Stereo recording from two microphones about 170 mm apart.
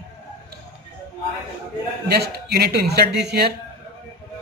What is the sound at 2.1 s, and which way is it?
A man's voice, 70° right (ahead or behind).